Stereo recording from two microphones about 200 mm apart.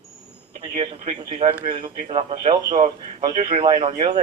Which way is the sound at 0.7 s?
25° right (ahead or behind).